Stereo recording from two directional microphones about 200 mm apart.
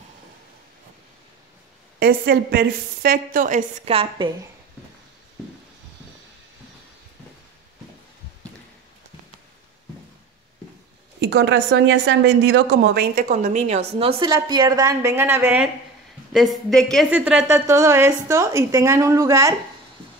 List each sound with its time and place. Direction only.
2.0 s a woman's voice: 50° right (ahead or behind); by 4.3 s 30° right (ahead or behind)
11.1 s a woman's voice: 60° right (ahead or behind)
13.1 s a woman's voice: 40° right (ahead or behind); by 15.7 s 10° right (ahead or behind)
16.9 s a woman's voice: 5° right (ahead or behind)